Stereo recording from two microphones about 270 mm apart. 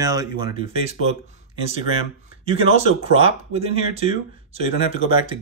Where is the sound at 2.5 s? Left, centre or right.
Right.